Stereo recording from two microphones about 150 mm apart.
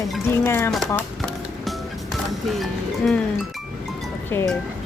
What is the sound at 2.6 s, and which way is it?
Speech, centre (ahead or behind).